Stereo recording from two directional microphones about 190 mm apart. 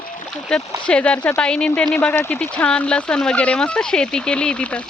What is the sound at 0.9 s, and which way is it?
Speech, 5° left (ahead or behind).